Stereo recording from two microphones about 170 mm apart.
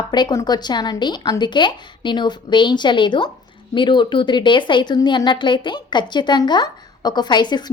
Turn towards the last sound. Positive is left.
turn(degrees=25)  # may be behind; listen again after turning